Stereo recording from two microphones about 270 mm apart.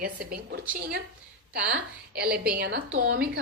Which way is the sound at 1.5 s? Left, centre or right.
Right.